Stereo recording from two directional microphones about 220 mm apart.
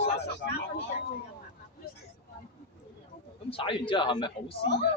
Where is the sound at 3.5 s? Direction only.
25° left (ahead or behind).